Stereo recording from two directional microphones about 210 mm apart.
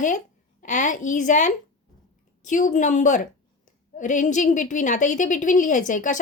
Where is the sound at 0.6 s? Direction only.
35° left (ahead or behind).